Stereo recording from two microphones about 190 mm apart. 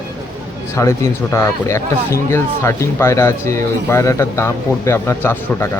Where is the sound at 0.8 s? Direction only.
15° left (ahead or behind).